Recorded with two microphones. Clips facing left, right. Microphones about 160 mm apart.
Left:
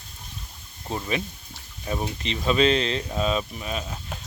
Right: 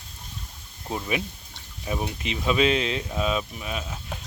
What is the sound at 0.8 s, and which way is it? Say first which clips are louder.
Speech: even; 5° right (ahead or behind).